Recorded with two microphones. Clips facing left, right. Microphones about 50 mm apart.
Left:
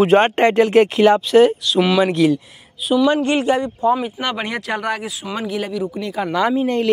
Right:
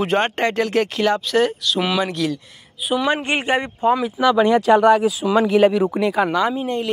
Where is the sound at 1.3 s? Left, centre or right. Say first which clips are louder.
Left 6 dB; centre.